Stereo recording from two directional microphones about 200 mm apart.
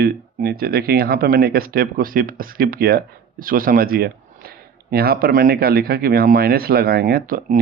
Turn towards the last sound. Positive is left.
turn(degrees=-45)  # may be behind; listen again after turning